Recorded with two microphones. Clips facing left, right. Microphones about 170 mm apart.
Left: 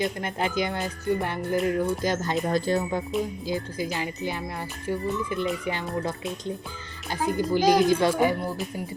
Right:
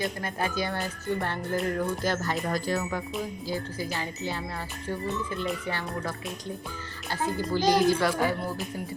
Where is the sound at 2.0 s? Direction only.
20° left (ahead or behind).